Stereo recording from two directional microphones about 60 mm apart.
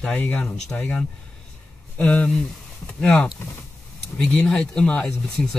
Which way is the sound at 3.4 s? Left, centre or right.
Left.